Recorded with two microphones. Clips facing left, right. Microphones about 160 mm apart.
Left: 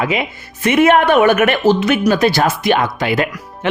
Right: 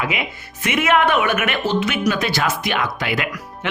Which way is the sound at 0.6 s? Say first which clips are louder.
Left 6 dB; 35° left (ahead or behind).